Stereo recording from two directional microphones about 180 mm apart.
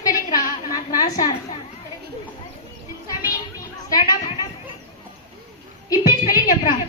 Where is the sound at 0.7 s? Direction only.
20° left (ahead or behind).